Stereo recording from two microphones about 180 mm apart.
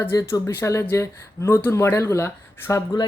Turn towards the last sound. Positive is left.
turn(degrees=15)  # may be behind; listen again after turning